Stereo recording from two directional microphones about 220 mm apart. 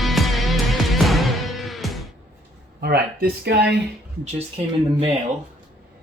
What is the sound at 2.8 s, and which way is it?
Speech, 45° right (ahead or behind).